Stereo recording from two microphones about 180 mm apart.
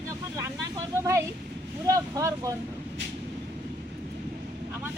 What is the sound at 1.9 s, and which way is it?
Speech, 20° right (ahead or behind).